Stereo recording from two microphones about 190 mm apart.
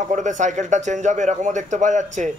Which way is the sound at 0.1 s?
40° right (ahead or behind).